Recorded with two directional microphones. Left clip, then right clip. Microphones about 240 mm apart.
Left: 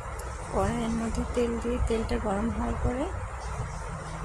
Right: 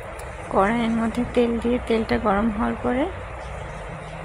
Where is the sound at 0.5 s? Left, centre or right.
Right.